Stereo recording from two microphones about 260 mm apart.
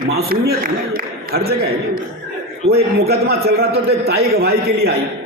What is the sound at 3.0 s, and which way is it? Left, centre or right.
A man's voice, right.